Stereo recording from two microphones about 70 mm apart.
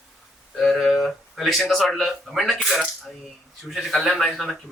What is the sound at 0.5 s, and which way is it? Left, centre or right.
Speech, centre.